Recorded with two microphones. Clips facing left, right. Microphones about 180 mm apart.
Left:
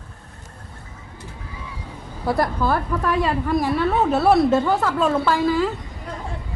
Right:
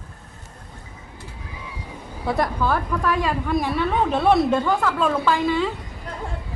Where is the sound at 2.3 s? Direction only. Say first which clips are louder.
Left 1 dB; 5° left (ahead or behind).